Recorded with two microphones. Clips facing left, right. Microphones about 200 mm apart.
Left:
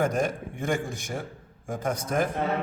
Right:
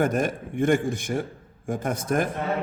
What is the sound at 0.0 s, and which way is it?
A man's voice, 55° right (ahead or behind).